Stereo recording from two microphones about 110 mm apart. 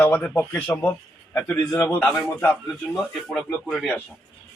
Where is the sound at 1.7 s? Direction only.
25° left (ahead or behind).